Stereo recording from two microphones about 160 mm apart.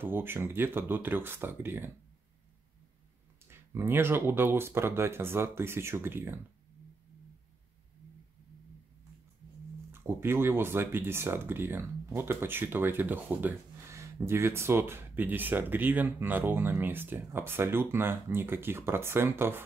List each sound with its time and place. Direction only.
0.0 s speech: 15° right (ahead or behind)
3.4 s speech: 15° right (ahead or behind)
10.0 s speech: 15° right (ahead or behind)